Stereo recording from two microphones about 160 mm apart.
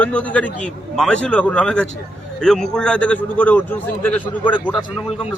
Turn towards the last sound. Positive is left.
turn(degrees=10)  # may be behind; listen again after turning